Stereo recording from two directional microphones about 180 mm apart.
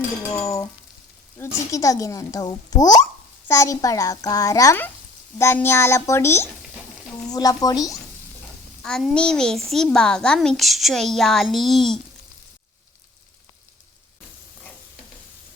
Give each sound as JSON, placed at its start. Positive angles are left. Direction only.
{"t": 0.3, "sound": "a child's voice", "side_deg": 15}
{"t": 8.8, "sound": "a woman's voice", "side_deg": 0}